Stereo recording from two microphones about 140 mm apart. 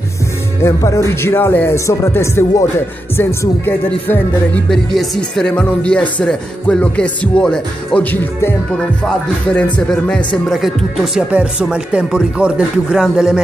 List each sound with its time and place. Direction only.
0.6 s speech: 20° left (ahead or behind)
4.6 s speech: 5° left (ahead or behind)
11.1 s speech: 10° right (ahead or behind)